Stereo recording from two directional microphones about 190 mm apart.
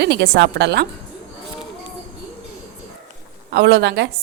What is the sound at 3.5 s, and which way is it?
Speech, 60° right (ahead or behind).